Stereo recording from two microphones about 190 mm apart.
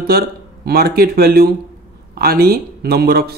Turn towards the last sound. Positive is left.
turn(degrees=-55)  # may be behind; listen again after turning